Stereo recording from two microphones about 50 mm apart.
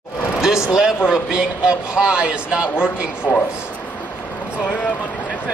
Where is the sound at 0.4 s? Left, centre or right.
Centre.